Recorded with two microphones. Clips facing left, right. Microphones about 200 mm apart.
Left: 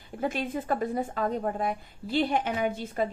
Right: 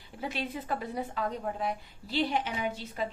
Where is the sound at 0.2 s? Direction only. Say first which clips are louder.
Left 5 dB; 50° left (ahead or behind).